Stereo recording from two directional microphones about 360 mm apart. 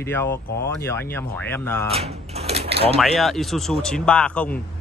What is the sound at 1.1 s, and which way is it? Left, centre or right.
Speech, centre.